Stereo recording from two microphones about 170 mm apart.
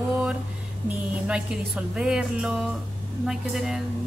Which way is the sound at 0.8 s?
5° right (ahead or behind).